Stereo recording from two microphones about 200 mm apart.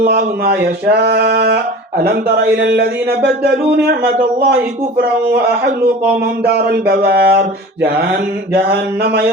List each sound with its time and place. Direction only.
0.0 s speech: 55° right (ahead or behind)
6.4 s mantra: 55° right (ahead or behind)